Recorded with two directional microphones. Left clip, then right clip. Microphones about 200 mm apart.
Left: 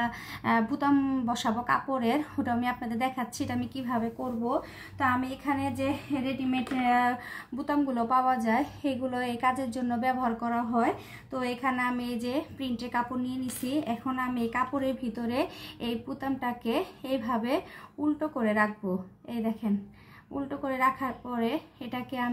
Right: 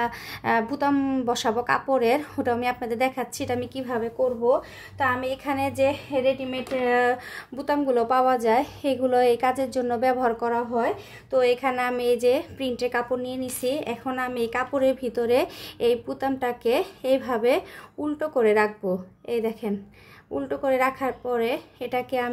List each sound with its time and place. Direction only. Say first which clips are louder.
0.0 s a woman's voice: right 4 dB; 45° right (ahead or behind)
4.9 s a woman's voice: right 4 dB; 55° right (ahead or behind)